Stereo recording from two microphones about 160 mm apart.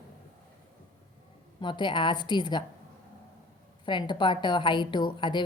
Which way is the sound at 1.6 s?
30° left (ahead or behind).